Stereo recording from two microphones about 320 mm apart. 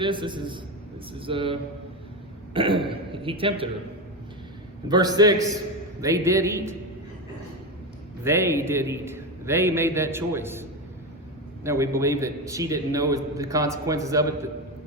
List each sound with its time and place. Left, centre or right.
0.0 s a man's voice: centre
4.9 s a man's voice: centre
8.2 s a man's voice: centre